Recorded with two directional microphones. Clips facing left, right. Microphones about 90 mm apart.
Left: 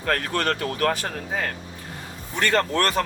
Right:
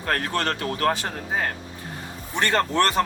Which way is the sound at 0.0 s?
25° right (ahead or behind).